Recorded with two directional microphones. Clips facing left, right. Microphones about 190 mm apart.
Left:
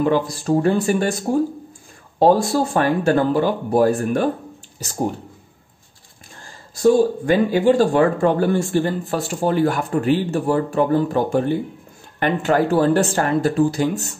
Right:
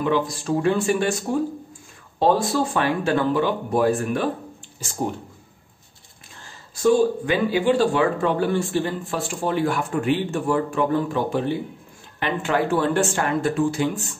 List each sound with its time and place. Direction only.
0.0 s speech: 40° left (ahead or behind)
6.4 s speech: 40° left (ahead or behind)